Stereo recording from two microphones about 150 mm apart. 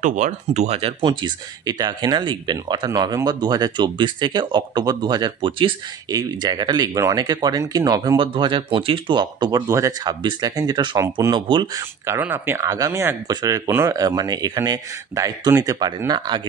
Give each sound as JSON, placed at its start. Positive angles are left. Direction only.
{"t": 0.0, "sound": "speech", "side_deg": -55}
{"t": 12.2, "sound": "speech", "side_deg": -15}